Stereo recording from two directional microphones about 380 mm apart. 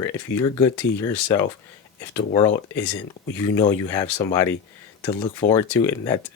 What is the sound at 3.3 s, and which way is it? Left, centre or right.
Speech, centre.